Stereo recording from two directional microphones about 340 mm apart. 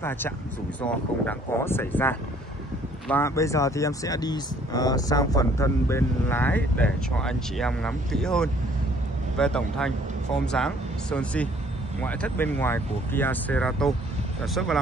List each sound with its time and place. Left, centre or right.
0.8 s speech: centre